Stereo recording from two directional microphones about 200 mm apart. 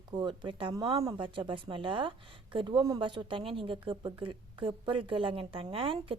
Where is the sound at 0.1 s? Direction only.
20° right (ahead or behind).